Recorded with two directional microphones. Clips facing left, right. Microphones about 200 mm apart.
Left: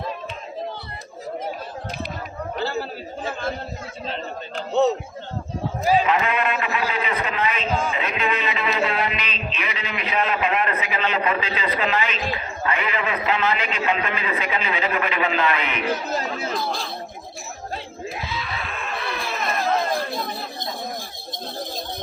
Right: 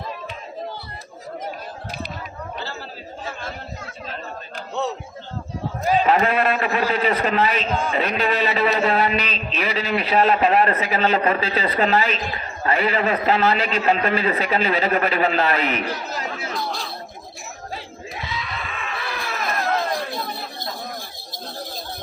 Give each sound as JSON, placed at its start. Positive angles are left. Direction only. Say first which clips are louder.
{"t": 4.0, "sound": "a sound", "louder": "left 4 dB", "side_deg": 25}
{"t": 6.1, "sound": "a man's voice", "louder": "right 4 dB", "side_deg": -40}
{"t": 15.9, "sound": "speech", "louder": "left 4 dB", "side_deg": 25}
{"t": 16.3, "sound": "chatter", "louder": "left 2 dB", "side_deg": 0}
{"t": 18.1, "sound": "screaming", "louder": "right 1 dB", "side_deg": 0}